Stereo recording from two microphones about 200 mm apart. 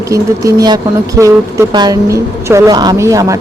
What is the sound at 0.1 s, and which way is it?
Speech, 20° right (ahead or behind).